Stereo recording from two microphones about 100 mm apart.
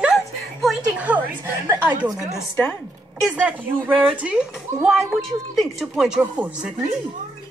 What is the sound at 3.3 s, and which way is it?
A woman's voice, 15° right (ahead or behind).